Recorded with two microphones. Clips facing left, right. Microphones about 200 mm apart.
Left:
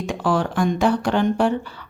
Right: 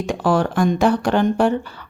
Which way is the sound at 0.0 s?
45° right (ahead or behind).